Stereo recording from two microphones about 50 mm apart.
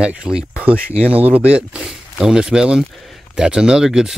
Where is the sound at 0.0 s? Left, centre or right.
Centre.